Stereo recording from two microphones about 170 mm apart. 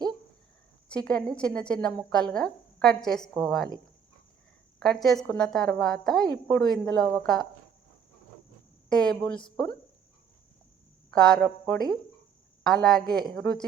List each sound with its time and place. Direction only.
0.9 s a woman's voice: 5° left (ahead or behind)
4.8 s a woman's voice: centre (ahead or behind)
8.9 s a woman's voice: 5° left (ahead or behind)
11.1 s a woman's voice: 5° left (ahead or behind)